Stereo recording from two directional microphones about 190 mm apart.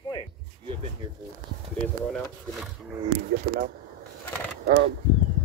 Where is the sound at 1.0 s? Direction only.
20° right (ahead or behind).